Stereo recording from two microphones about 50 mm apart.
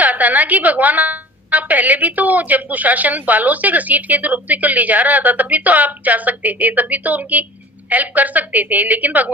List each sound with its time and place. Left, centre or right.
0.0 s a woman's voice: right